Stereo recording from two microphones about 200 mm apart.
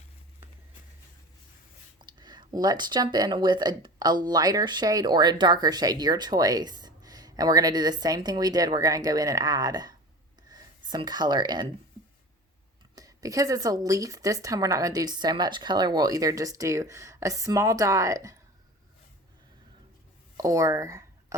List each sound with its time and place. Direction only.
2.0 s speech: 20° right (ahead or behind)
13.0 s speech: 15° right (ahead or behind)
20.3 s a sound: 15° right (ahead or behind)